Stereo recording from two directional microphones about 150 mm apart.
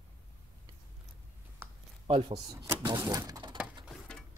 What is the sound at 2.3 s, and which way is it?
Speech, 20° right (ahead or behind).